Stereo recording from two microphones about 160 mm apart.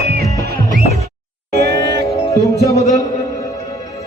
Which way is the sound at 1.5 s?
90° right.